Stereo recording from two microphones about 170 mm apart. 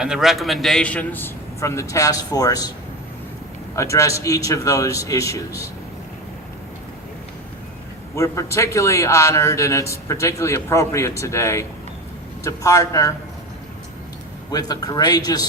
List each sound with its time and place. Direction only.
0.0 s a man's voice: 5° right (ahead or behind); by 2.7 s 20° left (ahead or behind)
3.8 s a man's voice: 20° left (ahead or behind)
8.1 s a man's voice: 15° left (ahead or behind)
14.5 s a man's voice: 20° left (ahead or behind)